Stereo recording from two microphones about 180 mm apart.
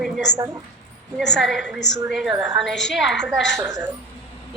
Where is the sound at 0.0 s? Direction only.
Centre (ahead or behind).